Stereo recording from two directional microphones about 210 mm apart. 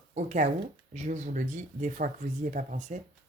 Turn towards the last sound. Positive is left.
turn(degrees=-35)  # may be behind; listen again after turning